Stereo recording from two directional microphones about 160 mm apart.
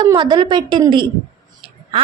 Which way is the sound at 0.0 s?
25° right (ahead or behind).